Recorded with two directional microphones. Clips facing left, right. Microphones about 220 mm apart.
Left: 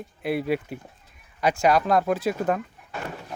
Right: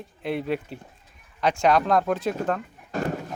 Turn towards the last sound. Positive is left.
turn(degrees=-40)  # may be behind; listen again after turning